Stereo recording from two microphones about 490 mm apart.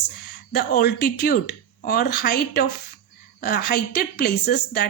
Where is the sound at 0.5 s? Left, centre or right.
Centre.